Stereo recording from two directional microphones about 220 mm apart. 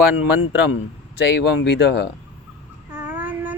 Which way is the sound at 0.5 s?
50° left (ahead or behind).